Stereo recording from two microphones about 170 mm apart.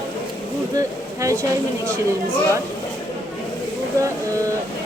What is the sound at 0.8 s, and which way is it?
Speech, 20° right (ahead or behind).